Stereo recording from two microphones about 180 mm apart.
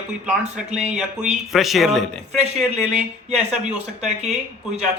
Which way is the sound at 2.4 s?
40° right (ahead or behind).